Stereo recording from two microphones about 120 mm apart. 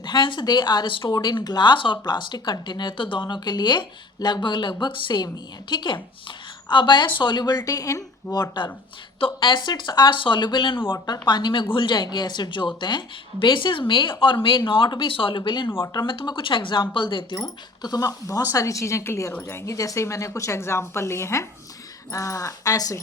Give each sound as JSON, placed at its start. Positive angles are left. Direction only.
{"t": 0.0, "sound": "speech", "side_deg": 40}
{"t": 16.1, "sound": "speech", "side_deg": 45}
{"t": 17.8, "sound": "speech", "side_deg": 30}